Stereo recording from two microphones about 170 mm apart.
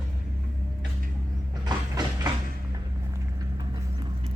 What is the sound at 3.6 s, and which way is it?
Vehicle, 25° right (ahead or behind).